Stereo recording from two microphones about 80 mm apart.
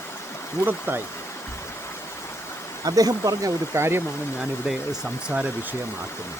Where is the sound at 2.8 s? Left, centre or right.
Right.